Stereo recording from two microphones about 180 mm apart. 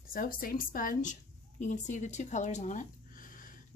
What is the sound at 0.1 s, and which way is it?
A woman's voice, 50° left (ahead or behind).